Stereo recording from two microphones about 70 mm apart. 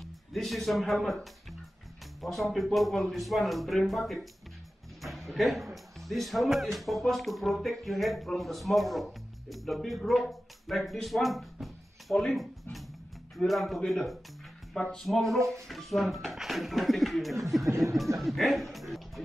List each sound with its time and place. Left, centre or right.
0.0 s speech: centre
13.4 s speech: centre
14.8 s music: centre
15.0 s speech: centre
15.3 s speech: right
15.7 s speech: centre